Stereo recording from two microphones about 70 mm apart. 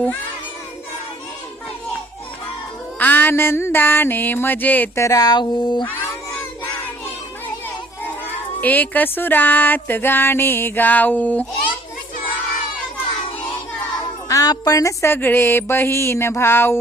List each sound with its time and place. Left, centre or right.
3.0 s a sound: left
4.9 s speech: left
8.6 s music: left
14.3 s music: left
15.0 s music: left